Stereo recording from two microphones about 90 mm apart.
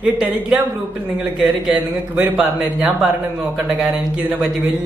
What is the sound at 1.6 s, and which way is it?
A man's voice, 15° right (ahead or behind).